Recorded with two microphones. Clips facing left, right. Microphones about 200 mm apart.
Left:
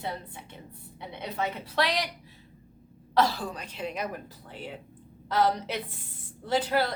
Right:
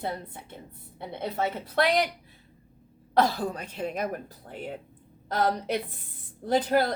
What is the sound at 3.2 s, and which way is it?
A woman's voice, 50° right (ahead or behind).